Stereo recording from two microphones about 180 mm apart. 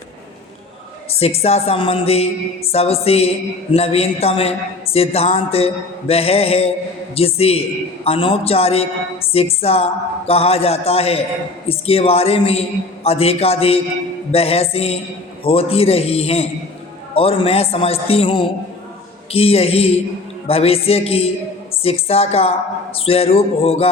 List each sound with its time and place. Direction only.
1.1 s a man's voice: 35° left (ahead or behind)